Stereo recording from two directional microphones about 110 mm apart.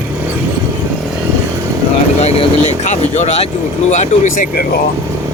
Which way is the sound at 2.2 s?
75° left (ahead or behind).